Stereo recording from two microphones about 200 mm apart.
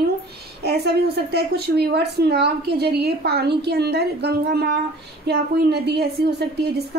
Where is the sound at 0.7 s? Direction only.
55° right (ahead or behind).